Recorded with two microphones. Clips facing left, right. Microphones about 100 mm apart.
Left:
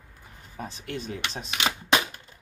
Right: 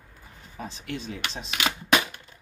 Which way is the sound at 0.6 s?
50° left (ahead or behind).